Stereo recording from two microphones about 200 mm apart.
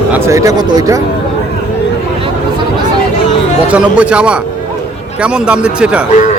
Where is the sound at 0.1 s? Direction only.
15° right (ahead or behind).